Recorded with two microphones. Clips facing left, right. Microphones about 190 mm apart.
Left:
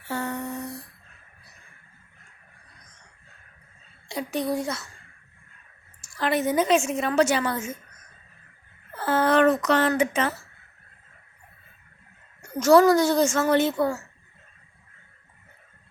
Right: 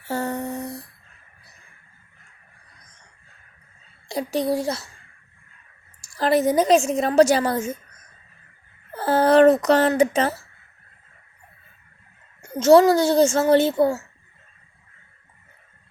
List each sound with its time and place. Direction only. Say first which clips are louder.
0.1 s humming: right 4 dB; 40° right (ahead or behind)
4.1 s a woman's voice: right 4 dB; 35° right (ahead or behind)
6.0 s a woman's voice: right 5 dB; 35° right (ahead or behind)
9.0 s a sound: right 5 dB; 35° right (ahead or behind)
12.4 s speech: right 3 dB; 25° right (ahead or behind)